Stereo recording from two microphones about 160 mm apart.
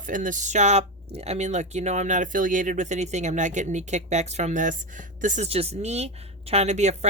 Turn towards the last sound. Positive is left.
turn(degrees=-45)  # may be behind; listen again after turning